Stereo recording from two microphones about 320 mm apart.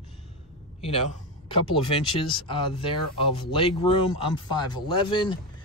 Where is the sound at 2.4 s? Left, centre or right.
Centre.